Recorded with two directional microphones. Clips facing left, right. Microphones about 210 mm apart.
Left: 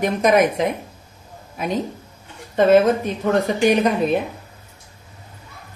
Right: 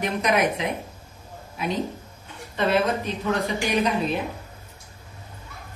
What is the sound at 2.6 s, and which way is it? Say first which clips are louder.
Speech: left 9 dB; 45° left (ahead or behind).